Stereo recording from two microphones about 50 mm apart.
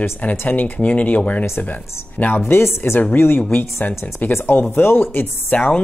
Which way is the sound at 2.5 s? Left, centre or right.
Left.